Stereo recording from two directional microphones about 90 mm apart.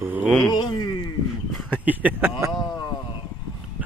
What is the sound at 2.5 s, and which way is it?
Speech, 50° left (ahead or behind).